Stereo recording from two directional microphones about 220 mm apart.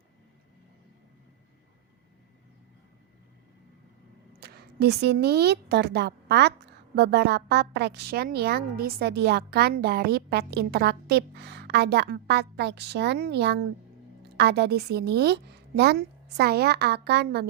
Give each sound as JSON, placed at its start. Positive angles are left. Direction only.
{"t": 4.4, "sound": "a woman's voice", "side_deg": -45}